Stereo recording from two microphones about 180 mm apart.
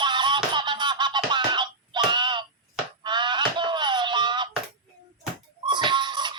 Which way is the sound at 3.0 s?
25° right (ahead or behind).